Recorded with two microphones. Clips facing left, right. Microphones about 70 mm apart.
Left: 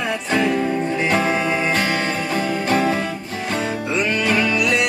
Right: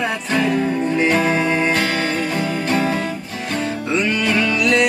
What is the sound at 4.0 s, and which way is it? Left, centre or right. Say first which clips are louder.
Music: even; centre.